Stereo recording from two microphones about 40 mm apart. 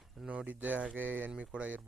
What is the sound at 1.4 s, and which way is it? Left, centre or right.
Speech, right.